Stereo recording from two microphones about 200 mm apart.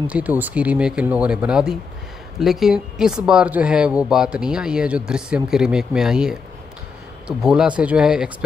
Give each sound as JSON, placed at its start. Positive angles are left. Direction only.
{"t": 0.0, "sound": "speech", "side_deg": -5}